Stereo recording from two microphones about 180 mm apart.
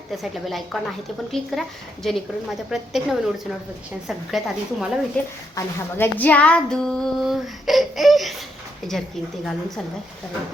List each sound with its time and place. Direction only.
0.2 s speech: centre (ahead or behind)
2.6 s speech: centre (ahead or behind)